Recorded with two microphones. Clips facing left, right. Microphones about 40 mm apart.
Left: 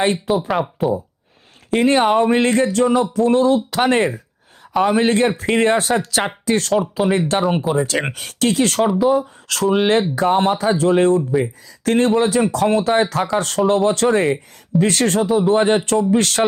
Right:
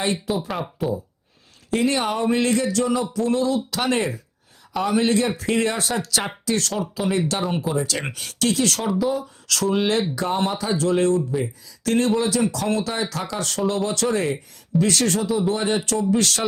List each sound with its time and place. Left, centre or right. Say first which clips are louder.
0.3 s speech: left 7 dB; centre
1.7 s speech: left 7 dB; left
6.7 s speech: left 7 dB; centre
7.1 s speech: left 5 dB; left
8.8 s speech: left 7 dB; centre
9.0 s speech: left 7 dB; left